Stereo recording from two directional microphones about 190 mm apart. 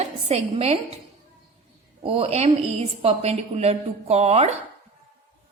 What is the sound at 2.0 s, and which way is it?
A woman's voice, 30° right (ahead or behind).